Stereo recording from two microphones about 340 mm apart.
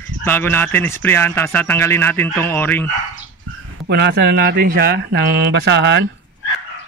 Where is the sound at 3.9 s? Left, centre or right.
Right.